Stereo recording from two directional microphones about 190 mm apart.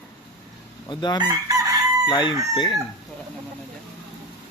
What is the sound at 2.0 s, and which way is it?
Speech, 25° left (ahead or behind).